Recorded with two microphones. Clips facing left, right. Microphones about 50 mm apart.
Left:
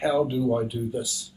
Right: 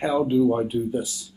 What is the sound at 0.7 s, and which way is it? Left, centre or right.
Speech, right.